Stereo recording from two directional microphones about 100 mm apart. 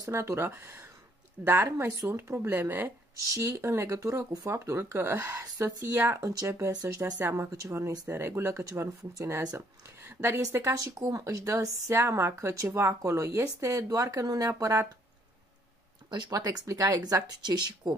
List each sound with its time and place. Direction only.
0.0 s speech: 30° right (ahead or behind)
4.5 s speech: 25° right (ahead or behind)
5.4 s speech: 35° right (ahead or behind)
7.2 s speech: 20° right (ahead or behind)
10.6 s speech: 35° right (ahead or behind)
16.1 s speech: 45° right (ahead or behind)